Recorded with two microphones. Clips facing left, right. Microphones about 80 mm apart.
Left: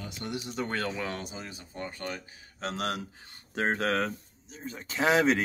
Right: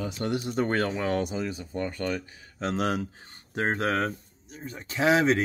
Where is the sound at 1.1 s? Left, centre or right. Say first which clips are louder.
Right 10 dB; right.